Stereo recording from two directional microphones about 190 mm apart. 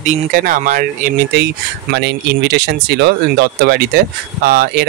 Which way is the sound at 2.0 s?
60° right (ahead or behind).